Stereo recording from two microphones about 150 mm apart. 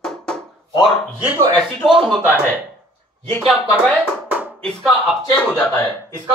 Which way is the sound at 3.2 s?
10° left (ahead or behind).